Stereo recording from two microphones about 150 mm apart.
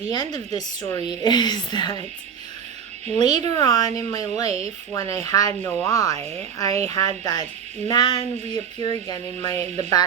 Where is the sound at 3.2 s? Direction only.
25° left (ahead or behind).